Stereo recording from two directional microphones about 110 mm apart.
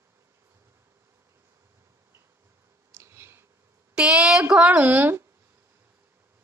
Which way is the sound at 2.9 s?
25° right (ahead or behind).